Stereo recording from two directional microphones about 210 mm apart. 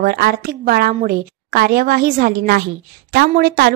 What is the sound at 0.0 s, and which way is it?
A woman's voice, 45° right (ahead or behind).